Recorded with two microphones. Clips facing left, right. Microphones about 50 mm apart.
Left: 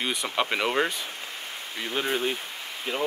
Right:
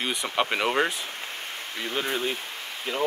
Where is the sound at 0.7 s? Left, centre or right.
Centre.